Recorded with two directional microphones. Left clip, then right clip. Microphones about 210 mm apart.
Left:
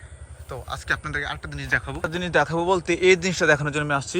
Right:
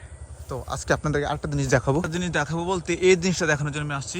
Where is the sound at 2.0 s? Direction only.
5° right (ahead or behind).